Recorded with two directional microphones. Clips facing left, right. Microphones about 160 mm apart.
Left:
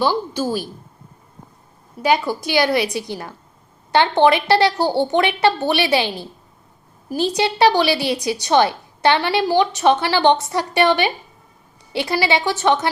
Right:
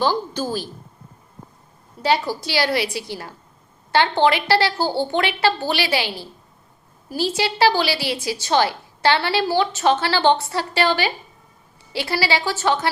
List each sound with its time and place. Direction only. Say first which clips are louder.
0.0 s a woman's voice: left 2 dB; 10° left (ahead or behind)
2.0 s a woman's voice: left 2 dB; 15° left (ahead or behind)